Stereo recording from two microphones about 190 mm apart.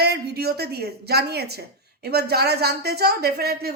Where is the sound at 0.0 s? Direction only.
55° right (ahead or behind).